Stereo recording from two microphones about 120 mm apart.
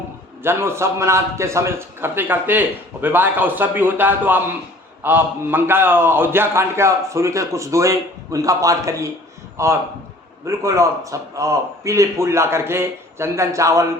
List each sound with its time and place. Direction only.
0.4 s a man's voice: 20° right (ahead or behind)